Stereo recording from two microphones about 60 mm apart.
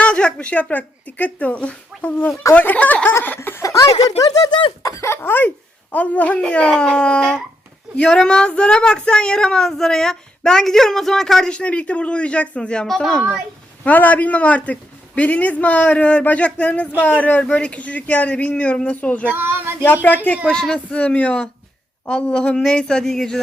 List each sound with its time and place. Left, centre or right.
0.0 s a woman's voice: centre
3.2 s laughter: left
3.6 s speech: left
4.8 s speech: left
5.0 s speech: left
5.9 s a woman's voice: left; by 11.5 s centre
11.5 s a woman's voice: left
13.8 s a woman's voice: left
19.3 s speech: right
19.8 s speech: left
20.5 s a woman's voice: centre